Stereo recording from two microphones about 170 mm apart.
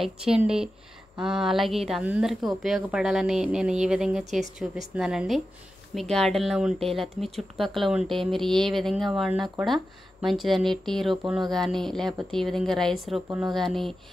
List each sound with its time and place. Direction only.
0.0 s speech: 5° right (ahead or behind)